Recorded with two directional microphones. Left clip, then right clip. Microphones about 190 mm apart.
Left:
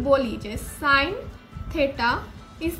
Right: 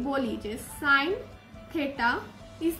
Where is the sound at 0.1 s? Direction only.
25° left (ahead or behind).